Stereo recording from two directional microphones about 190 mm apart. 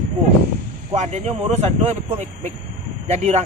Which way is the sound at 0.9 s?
35° right (ahead or behind).